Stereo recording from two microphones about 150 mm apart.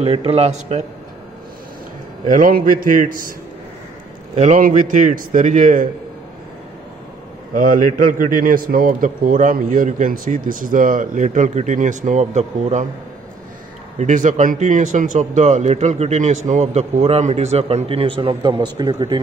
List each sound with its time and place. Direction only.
0.0 s speech: 40° right (ahead or behind)
2.2 s a man's voice: 65° right (ahead or behind)
4.4 s a man's voice: 60° right (ahead or behind)
7.5 s a man's voice: 65° right (ahead or behind); by 12.8 s 50° right (ahead or behind)
13.9 s speech: 55° right (ahead or behind); by 19.1 s 30° right (ahead or behind)